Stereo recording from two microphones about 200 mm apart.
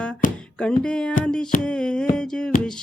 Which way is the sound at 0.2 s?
40° left (ahead or behind).